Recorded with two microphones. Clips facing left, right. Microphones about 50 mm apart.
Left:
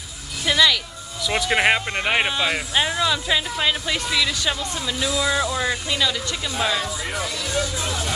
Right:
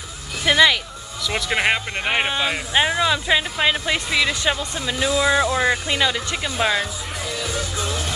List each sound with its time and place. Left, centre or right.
0.5 s a sound: right
1.2 s speech: centre
2.7 s speech: centre